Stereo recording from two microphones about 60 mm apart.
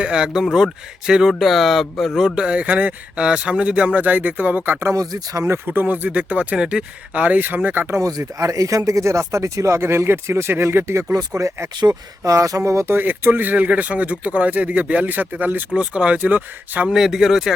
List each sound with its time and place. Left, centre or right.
0.0 s speech: centre
1.3 s speech: centre
2.2 s speech: centre
4.9 s speech: right
5.6 s speech: right
6.6 s speech: centre
7.1 s speech: right
8.2 s speech: right
12.2 s speech: right
12.9 s speech: right
15.7 s speech: centre
16.8 s speech: centre